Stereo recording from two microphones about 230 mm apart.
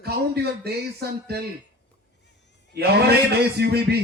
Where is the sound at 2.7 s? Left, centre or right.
Right.